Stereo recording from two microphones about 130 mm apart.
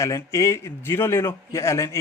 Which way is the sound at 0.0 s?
20° left (ahead or behind).